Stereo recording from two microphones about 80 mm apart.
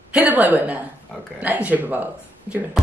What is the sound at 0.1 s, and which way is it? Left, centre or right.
A woman's voice, centre.